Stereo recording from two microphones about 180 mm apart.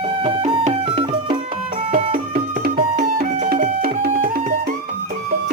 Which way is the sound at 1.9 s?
55° right (ahead or behind).